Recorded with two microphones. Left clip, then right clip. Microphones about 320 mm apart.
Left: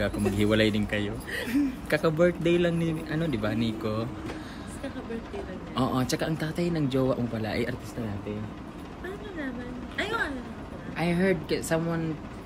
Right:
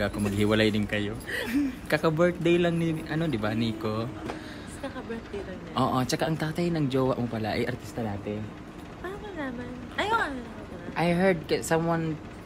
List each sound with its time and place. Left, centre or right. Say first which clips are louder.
0.0 s a man's voice: left 1 dB; centre
5.8 s a man's voice: right 2 dB; centre
9.9 s a sound: right 3 dB; centre
11.0 s speech: right 2 dB; centre